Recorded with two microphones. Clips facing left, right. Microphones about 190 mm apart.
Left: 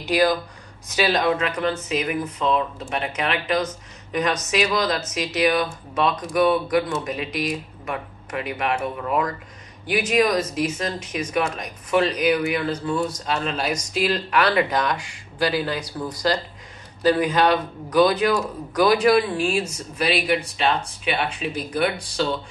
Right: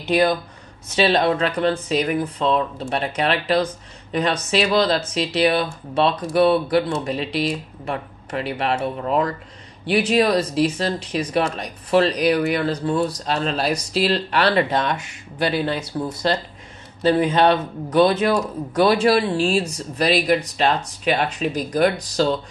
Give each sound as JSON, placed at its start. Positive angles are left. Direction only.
{"t": 0.1, "sound": "a man's voice", "side_deg": -25}